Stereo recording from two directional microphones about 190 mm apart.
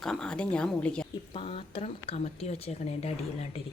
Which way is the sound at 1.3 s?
30° left (ahead or behind).